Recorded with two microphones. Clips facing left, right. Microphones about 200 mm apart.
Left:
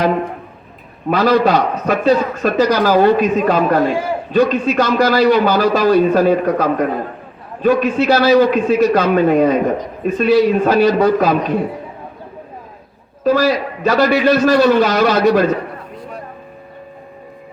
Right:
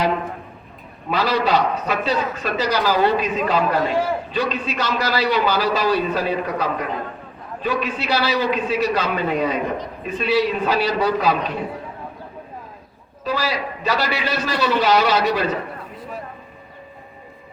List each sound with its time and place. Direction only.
1.1 s a man's voice: 50° left (ahead or behind)
13.2 s a man's voice: 50° left (ahead or behind)